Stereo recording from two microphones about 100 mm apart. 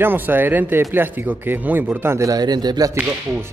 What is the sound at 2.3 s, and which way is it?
Speech, 45° right (ahead or behind).